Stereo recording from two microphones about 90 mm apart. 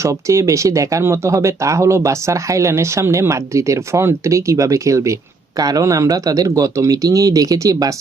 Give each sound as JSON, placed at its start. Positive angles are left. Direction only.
{"t": 0.0, "sound": "speech", "side_deg": -35}